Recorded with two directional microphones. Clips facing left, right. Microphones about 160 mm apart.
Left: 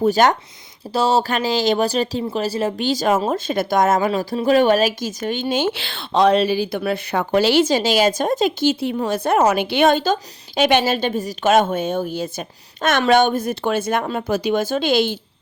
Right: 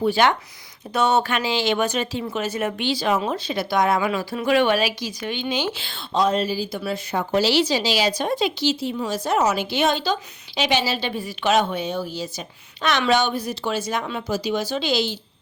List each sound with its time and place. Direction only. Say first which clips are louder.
0.0 s speech: left 3 dB; 40° left (ahead or behind)
0.9 s speech: left 2 dB; 30° left (ahead or behind)
2.8 s a woman's voice: left 4 dB; 45° left (ahead or behind)
5.8 s a woman's voice: left 5 dB; 70° left (ahead or behind); by 15.2 s 55° left (ahead or behind)